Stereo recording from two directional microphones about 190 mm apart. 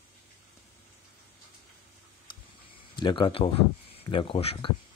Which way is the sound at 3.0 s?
25° left (ahead or behind).